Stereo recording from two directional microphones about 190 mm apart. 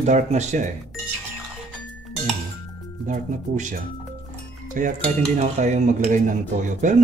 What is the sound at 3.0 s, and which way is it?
Speech, 40° right (ahead or behind).